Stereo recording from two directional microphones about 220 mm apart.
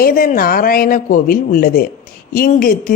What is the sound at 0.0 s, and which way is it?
A woman's voice, 40° left (ahead or behind).